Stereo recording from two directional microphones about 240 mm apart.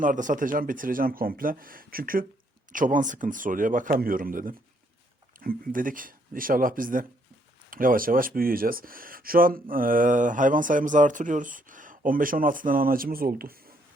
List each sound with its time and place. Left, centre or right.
0.0 s speech: right